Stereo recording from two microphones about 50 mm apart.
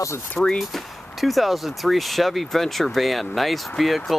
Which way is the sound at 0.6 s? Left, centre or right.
Centre.